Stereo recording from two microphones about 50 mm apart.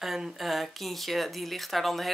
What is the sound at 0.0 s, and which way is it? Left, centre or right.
Speech, centre.